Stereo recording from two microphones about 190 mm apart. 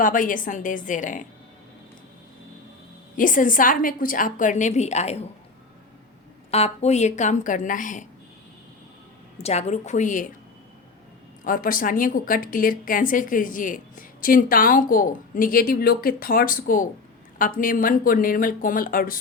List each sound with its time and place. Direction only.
0.0 s a woman's voice: 45° left (ahead or behind)
3.2 s a woman's voice: 45° left (ahead or behind)
6.5 s a woman's voice: 35° left (ahead or behind)
9.4 s a woman's voice: 35° left (ahead or behind)
11.4 s a woman's voice: 45° left (ahead or behind)